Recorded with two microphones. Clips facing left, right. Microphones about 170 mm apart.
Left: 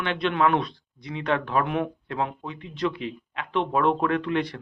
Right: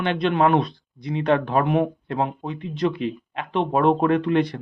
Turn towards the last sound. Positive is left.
turn(degrees=-45)  # may be behind; listen again after turning